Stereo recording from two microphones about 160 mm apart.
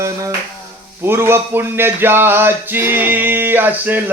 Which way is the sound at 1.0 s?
15° right (ahead or behind).